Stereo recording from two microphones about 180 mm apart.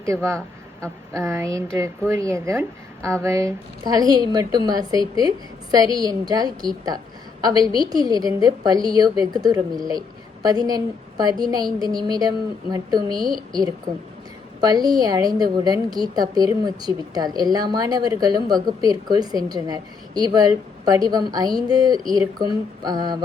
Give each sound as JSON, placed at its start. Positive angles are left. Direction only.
{"t": 0.3, "sound": "a woman's voice", "side_deg": -15}